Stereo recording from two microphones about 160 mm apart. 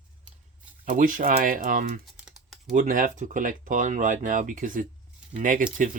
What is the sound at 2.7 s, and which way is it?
Speech, 55° right (ahead or behind).